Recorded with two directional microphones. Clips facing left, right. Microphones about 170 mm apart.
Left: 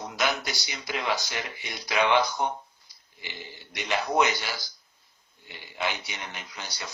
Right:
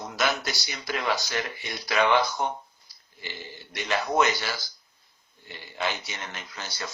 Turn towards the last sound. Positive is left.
turn(degrees=15)  # may be behind; listen again after turning